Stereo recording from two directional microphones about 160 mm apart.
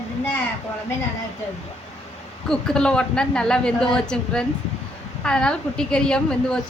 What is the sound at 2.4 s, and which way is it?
A woman's voice, 5° left (ahead or behind).